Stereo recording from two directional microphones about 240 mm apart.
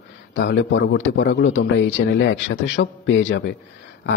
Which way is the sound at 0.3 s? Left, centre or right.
Left.